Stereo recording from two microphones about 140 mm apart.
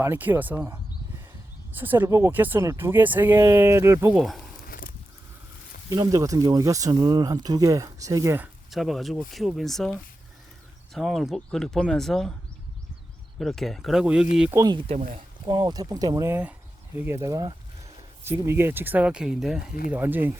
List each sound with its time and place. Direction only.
0.0 s speech: 15° right (ahead or behind)
1.8 s speech: 15° right (ahead or behind)
4.2 s speech: centre (ahead or behind)
5.9 s speech: 25° right (ahead or behind)
8.7 s speech: centre (ahead or behind)
13.4 s speech: centre (ahead or behind)
14.5 s speech: 25° right (ahead or behind)
16.3 s speech: 15° right (ahead or behind)
19.9 s speech: 15° right (ahead or behind)